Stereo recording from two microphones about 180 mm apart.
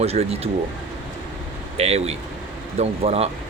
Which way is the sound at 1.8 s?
35° right (ahead or behind).